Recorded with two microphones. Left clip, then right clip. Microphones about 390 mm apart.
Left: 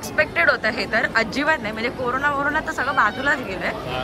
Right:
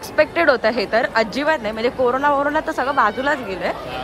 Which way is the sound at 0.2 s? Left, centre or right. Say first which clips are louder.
Right 3 dB; centre.